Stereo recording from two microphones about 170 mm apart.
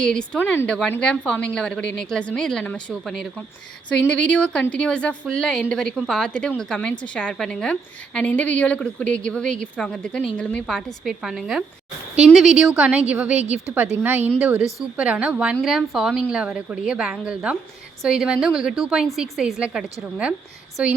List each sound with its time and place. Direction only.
0.0 s a woman's voice: 5° left (ahead or behind)